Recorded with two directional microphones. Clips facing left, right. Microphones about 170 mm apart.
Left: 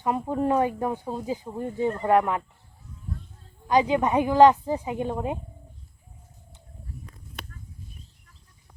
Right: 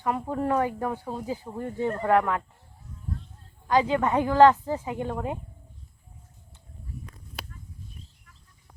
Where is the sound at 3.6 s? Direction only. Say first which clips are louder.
Left 1 dB; 15° left (ahead or behind).